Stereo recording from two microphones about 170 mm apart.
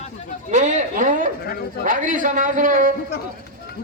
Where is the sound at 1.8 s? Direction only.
50° right (ahead or behind).